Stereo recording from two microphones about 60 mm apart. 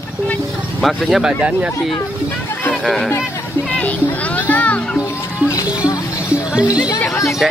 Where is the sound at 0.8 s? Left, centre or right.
Centre.